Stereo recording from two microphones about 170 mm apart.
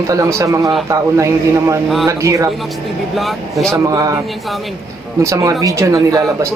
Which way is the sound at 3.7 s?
20° right (ahead or behind).